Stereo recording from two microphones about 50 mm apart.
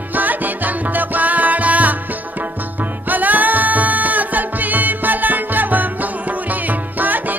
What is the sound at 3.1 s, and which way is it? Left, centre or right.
Music, right.